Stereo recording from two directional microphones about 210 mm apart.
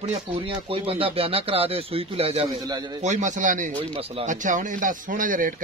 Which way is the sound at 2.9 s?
35° right (ahead or behind).